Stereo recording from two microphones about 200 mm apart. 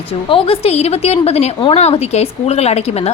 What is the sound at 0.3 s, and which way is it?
A woman's voice, 30° left (ahead or behind).